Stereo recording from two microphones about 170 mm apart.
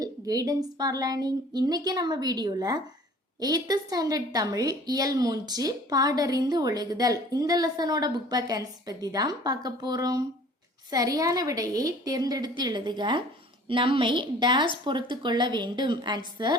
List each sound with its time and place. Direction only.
0.0 s a woman's voice: 20° right (ahead or behind)